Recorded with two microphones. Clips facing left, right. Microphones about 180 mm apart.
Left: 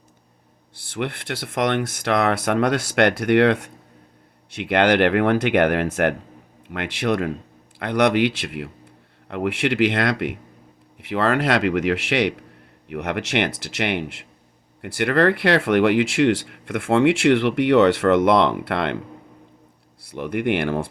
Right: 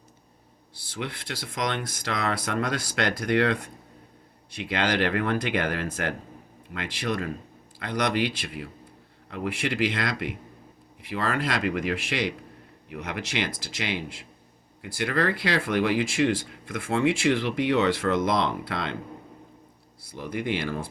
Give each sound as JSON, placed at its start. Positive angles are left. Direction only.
{"t": 0.8, "sound": "speech", "side_deg": 60}
{"t": 20.0, "sound": "speech", "side_deg": 65}